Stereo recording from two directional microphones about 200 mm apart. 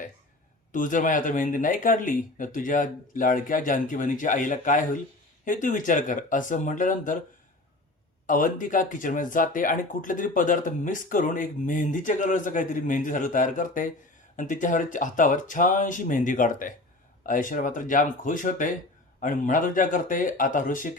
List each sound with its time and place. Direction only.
0.7 s speech: 40° left (ahead or behind)
8.3 s speech: 40° left (ahead or behind)